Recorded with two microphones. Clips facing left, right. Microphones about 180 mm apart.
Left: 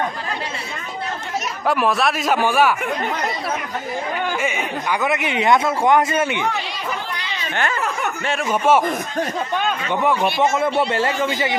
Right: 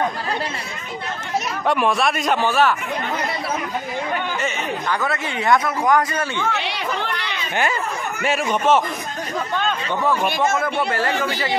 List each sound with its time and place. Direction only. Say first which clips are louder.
1.7 s speech: left 1 dB; centre (ahead or behind)
4.4 s speech: left 1 dB; 10° left (ahead or behind)
6.5 s chatter: right 2 dB; 75° right (ahead or behind)
8.5 s speech: left 3 dB; 10° left (ahead or behind)
10.5 s speech: left 3 dB; 25° left (ahead or behind)